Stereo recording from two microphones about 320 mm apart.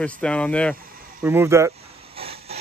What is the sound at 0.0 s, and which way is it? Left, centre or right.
Speech, centre.